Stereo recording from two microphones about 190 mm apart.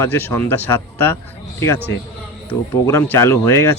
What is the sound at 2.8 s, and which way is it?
Speech, 15° left (ahead or behind).